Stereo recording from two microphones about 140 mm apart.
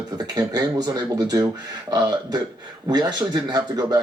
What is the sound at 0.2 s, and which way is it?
Speech, 30° right (ahead or behind).